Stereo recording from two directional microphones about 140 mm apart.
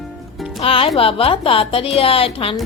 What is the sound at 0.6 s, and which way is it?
A woman's voice, 40° left (ahead or behind).